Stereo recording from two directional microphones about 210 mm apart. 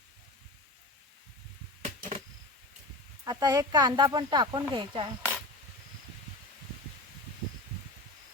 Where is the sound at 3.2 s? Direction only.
20° right (ahead or behind).